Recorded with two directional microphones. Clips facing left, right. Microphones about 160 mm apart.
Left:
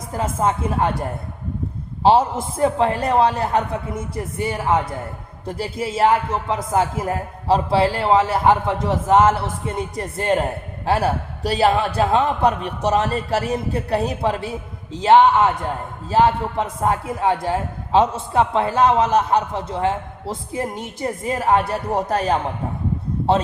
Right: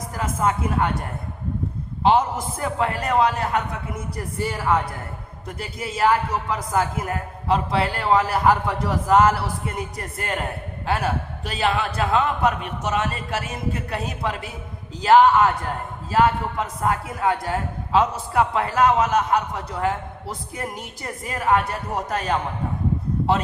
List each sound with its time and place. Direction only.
0.1 s a man's voice: 30° left (ahead or behind)
2.0 s a man's voice: 30° left (ahead or behind)